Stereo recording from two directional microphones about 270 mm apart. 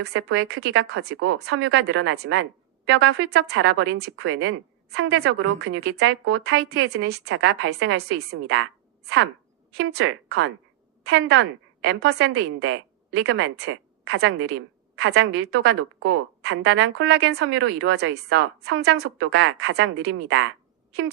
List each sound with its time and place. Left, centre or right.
0.0 s a woman's voice: right
6.7 s a woman's voice: right